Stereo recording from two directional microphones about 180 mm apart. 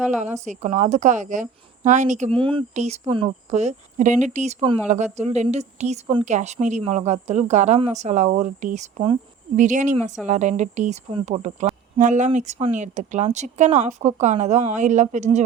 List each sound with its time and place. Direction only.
0.4 s a woman's voice: 40° right (ahead or behind)
2.3 s a woman's voice: 30° right (ahead or behind)